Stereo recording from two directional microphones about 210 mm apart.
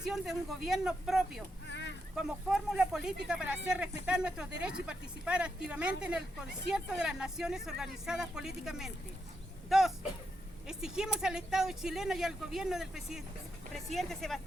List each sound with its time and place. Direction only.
0.0 s speech: centre (ahead or behind)
1.6 s a sound: 55° left (ahead or behind)
2.1 s speech: 5° right (ahead or behind)